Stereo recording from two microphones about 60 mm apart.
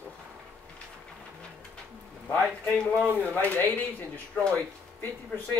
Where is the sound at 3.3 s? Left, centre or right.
Left.